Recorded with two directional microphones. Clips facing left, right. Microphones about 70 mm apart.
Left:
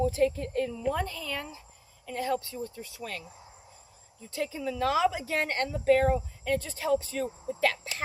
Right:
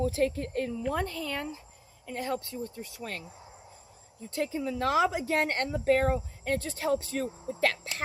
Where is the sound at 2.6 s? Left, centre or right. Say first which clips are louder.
Even; right.